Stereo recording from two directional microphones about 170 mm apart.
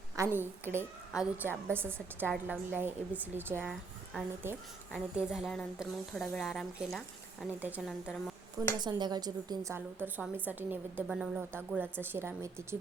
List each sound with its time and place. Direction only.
0.2 s a woman's voice: 10° right (ahead or behind)
8.8 s a woman's voice: 25° right (ahead or behind)
9.7 s a woman's voice: 10° right (ahead or behind)